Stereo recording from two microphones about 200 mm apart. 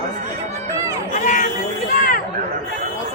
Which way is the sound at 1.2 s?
40° left (ahead or behind).